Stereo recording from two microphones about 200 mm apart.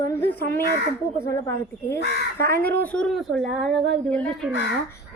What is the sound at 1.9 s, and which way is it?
Speech, 55° left (ahead or behind).